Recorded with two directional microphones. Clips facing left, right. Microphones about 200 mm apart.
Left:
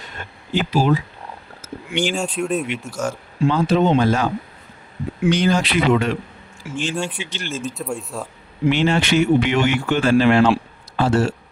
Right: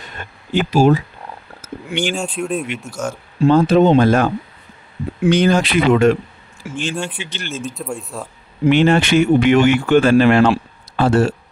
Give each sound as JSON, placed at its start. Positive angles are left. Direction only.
{"t": 0.2, "sound": "speech", "side_deg": -55}
{"t": 1.6, "sound": "a sound", "side_deg": -50}
{"t": 2.1, "sound": "speech", "side_deg": 0}
{"t": 3.4, "sound": "speech", "side_deg": -50}
{"t": 5.3, "sound": "speech", "side_deg": -55}
{"t": 6.9, "sound": "speech", "side_deg": 0}
{"t": 7.2, "sound": "speech", "side_deg": -55}
{"t": 7.8, "sound": "speech", "side_deg": 0}
{"t": 8.7, "sound": "speech", "side_deg": -55}